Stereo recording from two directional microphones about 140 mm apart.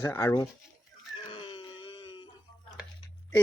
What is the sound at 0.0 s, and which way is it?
Speech, 20° left (ahead or behind).